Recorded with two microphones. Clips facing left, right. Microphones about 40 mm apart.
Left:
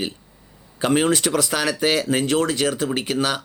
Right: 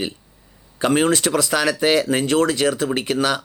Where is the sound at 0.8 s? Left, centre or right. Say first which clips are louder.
Right 1 dB; right.